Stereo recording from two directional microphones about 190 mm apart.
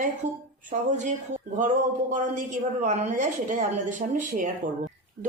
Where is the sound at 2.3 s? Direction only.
40° right (ahead or behind).